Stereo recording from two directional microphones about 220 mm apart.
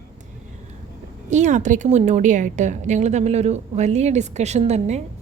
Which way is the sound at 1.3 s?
35° right (ahead or behind).